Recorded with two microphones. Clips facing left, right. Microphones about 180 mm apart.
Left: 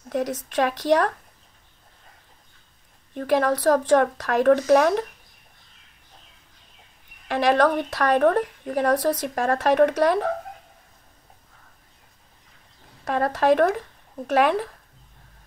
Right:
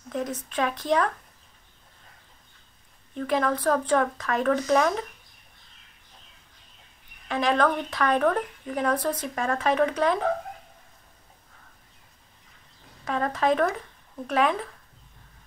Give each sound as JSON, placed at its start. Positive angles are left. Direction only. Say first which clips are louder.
{"t": 0.1, "sound": "speech", "louder": "left 5 dB", "side_deg": 85}
{"t": 3.2, "sound": "speech", "louder": "left 4 dB", "side_deg": 70}
{"t": 7.2, "sound": "speech", "louder": "left 4 dB", "side_deg": 80}
{"t": 13.0, "sound": "speech", "louder": "left 4 dB", "side_deg": 75}